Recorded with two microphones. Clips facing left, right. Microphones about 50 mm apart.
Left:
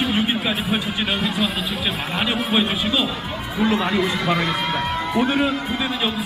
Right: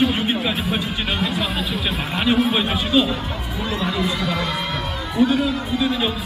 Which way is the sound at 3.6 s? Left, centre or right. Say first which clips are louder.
Left 6 dB; centre.